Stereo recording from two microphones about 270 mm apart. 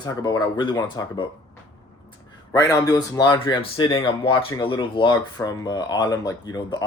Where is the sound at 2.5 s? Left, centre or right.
Centre.